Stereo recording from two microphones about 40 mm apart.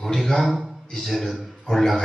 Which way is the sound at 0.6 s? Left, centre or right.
Centre.